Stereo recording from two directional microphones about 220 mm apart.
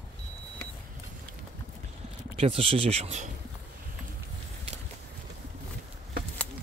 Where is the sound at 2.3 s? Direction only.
25° right (ahead or behind).